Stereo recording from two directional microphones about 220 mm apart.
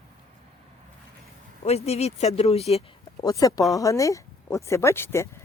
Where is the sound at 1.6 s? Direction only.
30° left (ahead or behind).